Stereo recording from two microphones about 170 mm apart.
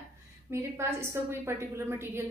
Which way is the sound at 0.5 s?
15° right (ahead or behind).